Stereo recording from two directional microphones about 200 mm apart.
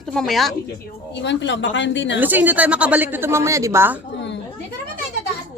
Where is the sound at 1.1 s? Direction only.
60° left (ahead or behind).